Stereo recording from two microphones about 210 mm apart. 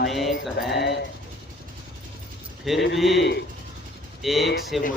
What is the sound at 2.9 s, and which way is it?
Mantra, centre (ahead or behind).